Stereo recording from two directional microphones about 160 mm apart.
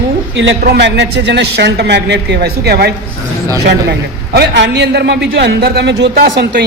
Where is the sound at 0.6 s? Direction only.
90° right.